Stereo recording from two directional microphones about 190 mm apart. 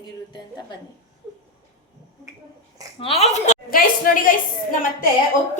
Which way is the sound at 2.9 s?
30° left (ahead or behind).